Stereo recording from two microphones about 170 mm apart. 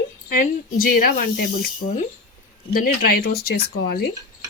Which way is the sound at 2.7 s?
60° left (ahead or behind).